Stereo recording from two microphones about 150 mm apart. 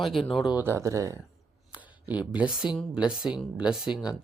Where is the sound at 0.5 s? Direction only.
15° right (ahead or behind).